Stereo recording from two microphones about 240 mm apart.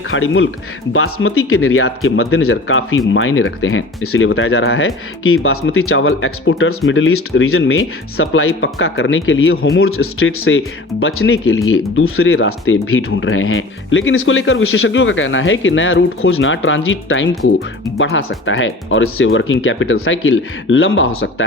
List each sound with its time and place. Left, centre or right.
0.1 s speech: left